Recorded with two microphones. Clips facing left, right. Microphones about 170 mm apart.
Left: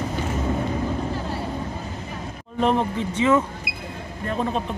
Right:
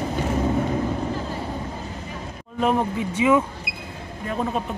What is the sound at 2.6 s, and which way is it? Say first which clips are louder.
Speech: even; 5° right (ahead or behind).